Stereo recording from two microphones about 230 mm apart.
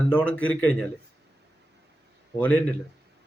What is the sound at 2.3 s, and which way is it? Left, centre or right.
Speech, centre.